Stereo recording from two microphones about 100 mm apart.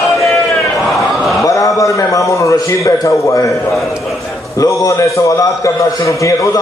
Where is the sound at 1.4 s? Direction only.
35° left (ahead or behind).